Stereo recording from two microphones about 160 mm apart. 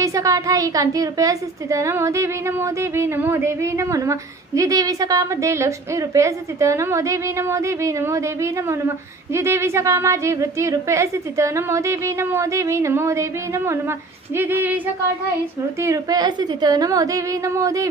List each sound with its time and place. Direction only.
0.0 s a woman's voice: 20° right (ahead or behind)
15.8 s a woman's voice: 20° right (ahead or behind)